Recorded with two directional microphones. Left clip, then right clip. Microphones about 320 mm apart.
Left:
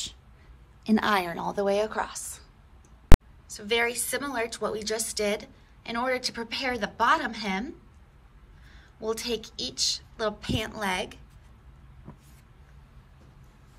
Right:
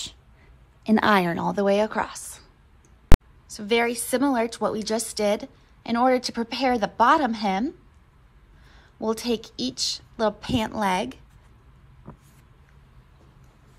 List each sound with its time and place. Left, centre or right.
0.8 s a woman's voice: right
3.1 s a sound: centre
3.4 s a woman's voice: centre